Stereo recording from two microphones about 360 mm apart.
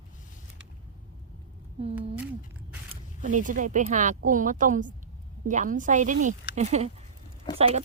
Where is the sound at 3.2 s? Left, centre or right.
Right.